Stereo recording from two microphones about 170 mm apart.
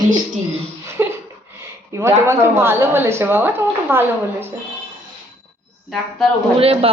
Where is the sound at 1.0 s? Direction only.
15° right (ahead or behind).